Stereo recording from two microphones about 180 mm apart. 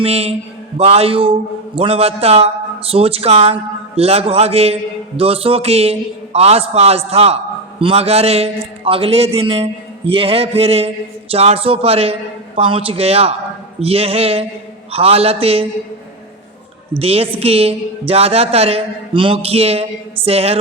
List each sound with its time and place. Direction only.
0.0 s a man's voice: 35° right (ahead or behind)
17.0 s a man's voice: 35° right (ahead or behind)